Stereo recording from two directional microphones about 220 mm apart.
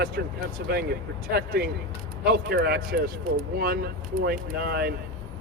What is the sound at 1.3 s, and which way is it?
Speech, 45° right (ahead or behind).